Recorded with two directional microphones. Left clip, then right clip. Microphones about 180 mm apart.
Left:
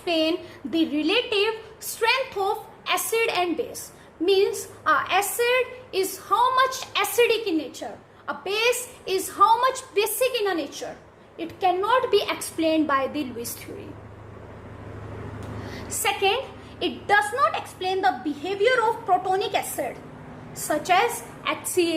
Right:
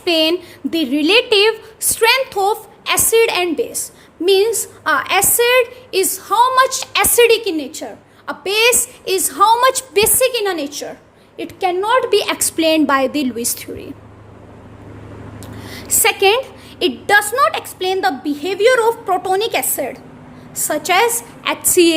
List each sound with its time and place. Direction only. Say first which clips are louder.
0.0 s a woman's voice: right 8 dB; 55° right (ahead or behind)
15.6 s a woman's voice: right 10 dB; 60° right (ahead or behind)